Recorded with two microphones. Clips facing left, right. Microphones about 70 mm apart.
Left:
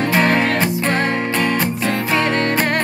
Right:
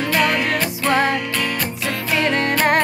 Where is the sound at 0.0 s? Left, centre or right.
Left.